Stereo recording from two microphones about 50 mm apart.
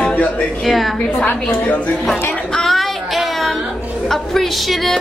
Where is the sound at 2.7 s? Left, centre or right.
Centre.